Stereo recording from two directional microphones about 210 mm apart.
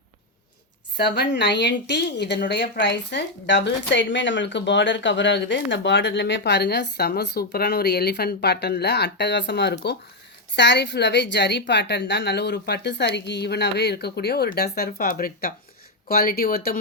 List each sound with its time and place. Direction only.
0.9 s speech: 50° left (ahead or behind)